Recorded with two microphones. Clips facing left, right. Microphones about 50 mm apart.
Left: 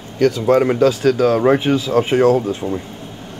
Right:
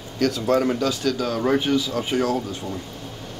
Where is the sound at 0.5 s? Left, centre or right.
Left.